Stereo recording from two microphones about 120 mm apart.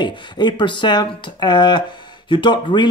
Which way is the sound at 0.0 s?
40° left (ahead or behind).